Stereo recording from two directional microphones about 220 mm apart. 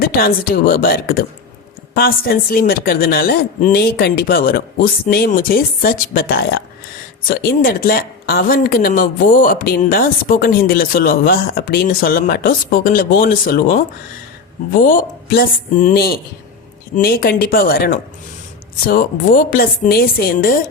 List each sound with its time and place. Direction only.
0.0 s speech: 45° left (ahead or behind)